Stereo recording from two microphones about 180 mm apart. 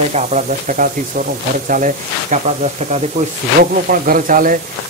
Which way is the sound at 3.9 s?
50° right (ahead or behind).